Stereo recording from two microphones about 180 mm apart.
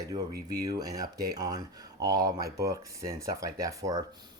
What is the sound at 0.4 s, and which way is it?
Speech, 20° right (ahead or behind).